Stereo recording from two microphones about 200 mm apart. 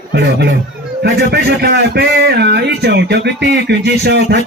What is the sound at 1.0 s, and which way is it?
Speech, 55° right (ahead or behind).